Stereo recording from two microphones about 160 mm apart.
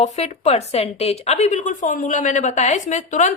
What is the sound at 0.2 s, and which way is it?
A woman's voice, 40° left (ahead or behind).